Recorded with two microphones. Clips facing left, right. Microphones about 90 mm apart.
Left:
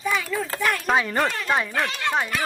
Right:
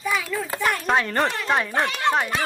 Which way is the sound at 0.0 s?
Centre (ahead or behind).